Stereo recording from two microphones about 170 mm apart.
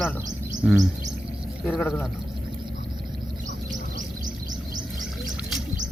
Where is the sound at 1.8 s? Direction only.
10° left (ahead or behind).